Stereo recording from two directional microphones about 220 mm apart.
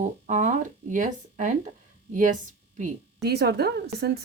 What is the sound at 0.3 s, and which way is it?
Speech, 35° right (ahead or behind).